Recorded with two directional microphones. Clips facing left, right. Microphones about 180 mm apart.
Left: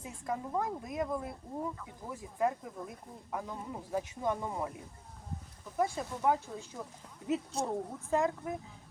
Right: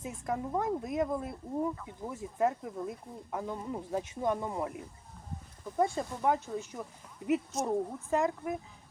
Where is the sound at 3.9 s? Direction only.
15° right (ahead or behind).